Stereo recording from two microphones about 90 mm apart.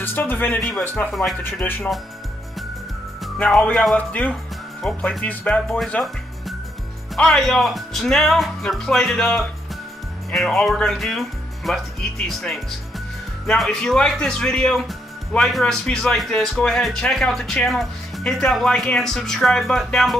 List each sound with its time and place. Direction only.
0.0 s speech: 20° left (ahead or behind)
3.3 s speech: 10° left (ahead or behind)
7.2 s speech: 5° left (ahead or behind)